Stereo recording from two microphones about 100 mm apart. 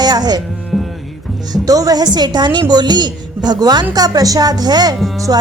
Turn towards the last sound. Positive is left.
turn(degrees=-40)  # may be behind; listen again after turning